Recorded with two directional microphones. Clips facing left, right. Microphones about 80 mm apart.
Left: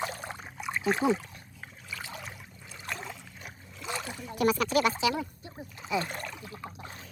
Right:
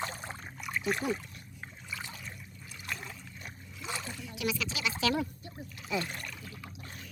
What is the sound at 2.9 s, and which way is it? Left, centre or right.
Boat, left.